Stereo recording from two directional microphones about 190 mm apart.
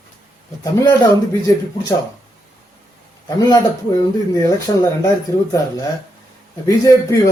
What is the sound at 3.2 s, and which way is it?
Speech, 20° left (ahead or behind).